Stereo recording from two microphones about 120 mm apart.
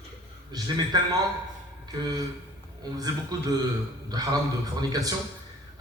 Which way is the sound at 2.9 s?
30° right (ahead or behind).